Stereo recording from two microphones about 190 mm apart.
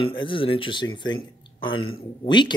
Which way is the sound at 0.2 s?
25° left (ahead or behind).